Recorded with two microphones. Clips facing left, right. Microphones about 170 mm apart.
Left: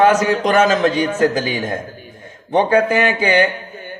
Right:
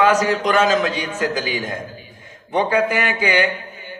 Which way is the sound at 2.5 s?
25° left (ahead or behind).